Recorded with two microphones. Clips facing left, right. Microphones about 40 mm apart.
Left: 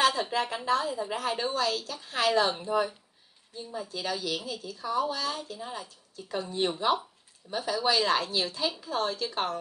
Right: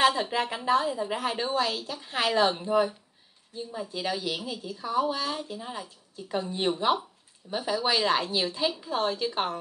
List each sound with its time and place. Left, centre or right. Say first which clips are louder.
0.0 s a woman's voice: right 2 dB; centre